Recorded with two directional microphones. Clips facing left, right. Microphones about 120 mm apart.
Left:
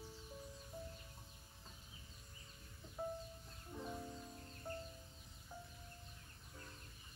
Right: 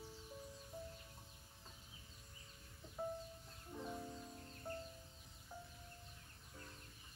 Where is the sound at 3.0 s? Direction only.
Centre (ahead or behind).